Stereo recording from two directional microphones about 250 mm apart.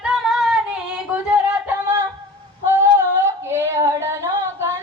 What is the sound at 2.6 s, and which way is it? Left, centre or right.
Female singing, centre.